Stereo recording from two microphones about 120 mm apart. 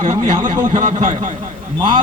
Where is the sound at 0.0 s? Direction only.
90° right.